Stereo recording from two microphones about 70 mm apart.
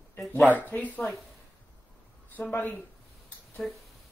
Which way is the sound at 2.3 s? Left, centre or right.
Left.